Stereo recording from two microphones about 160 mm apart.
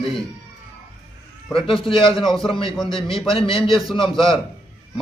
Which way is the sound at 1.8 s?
35° left (ahead or behind).